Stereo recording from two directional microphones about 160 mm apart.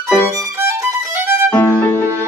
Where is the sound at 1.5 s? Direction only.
15° left (ahead or behind).